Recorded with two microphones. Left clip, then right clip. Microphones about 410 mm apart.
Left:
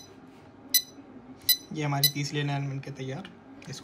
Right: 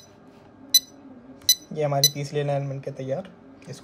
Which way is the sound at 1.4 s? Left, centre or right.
Centre.